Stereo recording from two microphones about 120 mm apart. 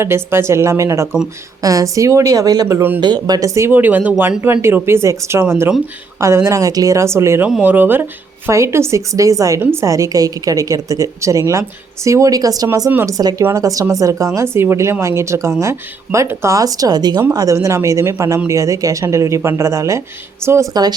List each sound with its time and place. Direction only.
0.0 s a woman's voice: 20° right (ahead or behind)
3.0 s a woman's voice: 35° right (ahead or behind)
12.9 s a woman's voice: 20° right (ahead or behind)